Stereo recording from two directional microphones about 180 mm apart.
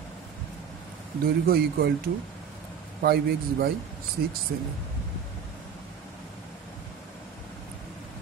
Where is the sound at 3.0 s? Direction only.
60° right (ahead or behind).